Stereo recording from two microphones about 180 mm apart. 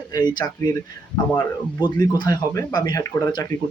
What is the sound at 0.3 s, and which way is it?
Speech, 20° left (ahead or behind).